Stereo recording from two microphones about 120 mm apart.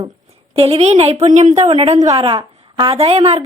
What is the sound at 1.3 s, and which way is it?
Speech, 80° right.